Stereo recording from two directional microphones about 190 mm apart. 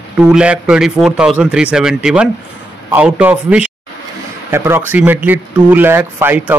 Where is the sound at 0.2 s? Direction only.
5° right (ahead or behind).